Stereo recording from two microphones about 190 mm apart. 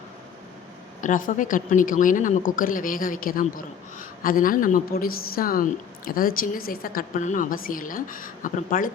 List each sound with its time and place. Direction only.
1.0 s a woman's voice: 45° left (ahead or behind)